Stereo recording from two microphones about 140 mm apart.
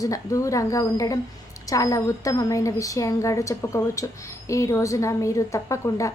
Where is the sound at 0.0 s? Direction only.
25° left (ahead or behind).